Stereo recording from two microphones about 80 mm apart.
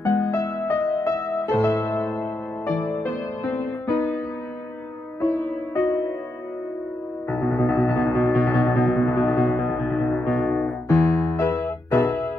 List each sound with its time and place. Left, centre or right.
0.0 s music: left
5.2 s music: left
7.2 s music: left
8.8 s music: centre
9.1 s music: centre
10.9 s keyboard: left